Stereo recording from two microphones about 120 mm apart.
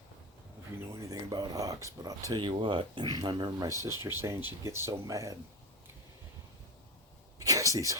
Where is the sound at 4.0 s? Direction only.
20° right (ahead or behind).